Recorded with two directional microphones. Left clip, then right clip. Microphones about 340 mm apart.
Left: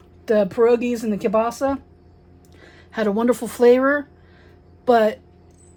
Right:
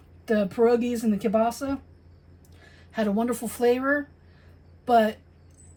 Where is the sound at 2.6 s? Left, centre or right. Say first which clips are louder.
Left 5 dB; left.